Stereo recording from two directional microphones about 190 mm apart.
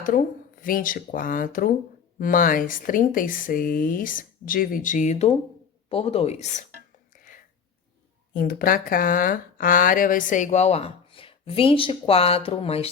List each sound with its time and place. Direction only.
0.6 s speech: 45° left (ahead or behind)
7.2 s a sound: 45° left (ahead or behind)
8.3 s speech: 50° left (ahead or behind); by 12.9 s 30° left (ahead or behind)